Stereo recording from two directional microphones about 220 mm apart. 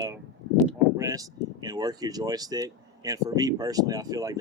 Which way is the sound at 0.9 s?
15° right (ahead or behind).